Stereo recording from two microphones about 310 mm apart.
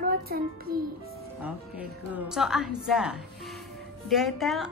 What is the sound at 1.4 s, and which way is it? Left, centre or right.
Speech, centre.